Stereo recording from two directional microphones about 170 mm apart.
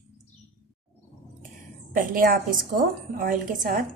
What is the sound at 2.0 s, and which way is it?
A woman's voice, 55° right (ahead or behind).